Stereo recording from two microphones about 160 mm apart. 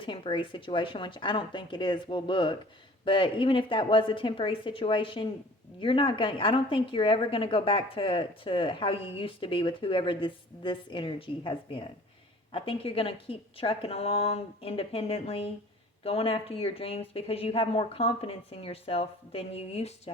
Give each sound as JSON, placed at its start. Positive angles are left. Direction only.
{"t": 0.0, "sound": "a woman's voice", "side_deg": 30}